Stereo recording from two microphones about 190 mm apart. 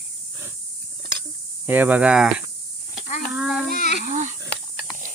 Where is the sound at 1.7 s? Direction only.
10° right (ahead or behind).